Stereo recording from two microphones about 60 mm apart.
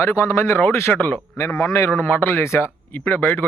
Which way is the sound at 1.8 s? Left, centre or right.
Left.